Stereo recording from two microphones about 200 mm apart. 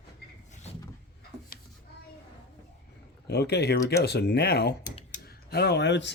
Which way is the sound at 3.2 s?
55° left (ahead or behind).